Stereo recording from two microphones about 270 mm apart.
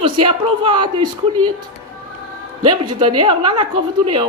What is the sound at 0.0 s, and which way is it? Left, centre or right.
Speech, centre.